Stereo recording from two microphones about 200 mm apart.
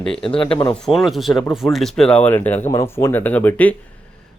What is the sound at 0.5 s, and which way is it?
Speech, 25° left (ahead or behind).